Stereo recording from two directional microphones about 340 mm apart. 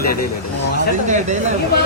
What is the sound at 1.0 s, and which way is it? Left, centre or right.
Speech, right.